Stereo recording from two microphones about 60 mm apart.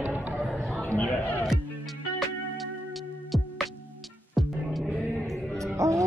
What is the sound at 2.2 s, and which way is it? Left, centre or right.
Music, centre.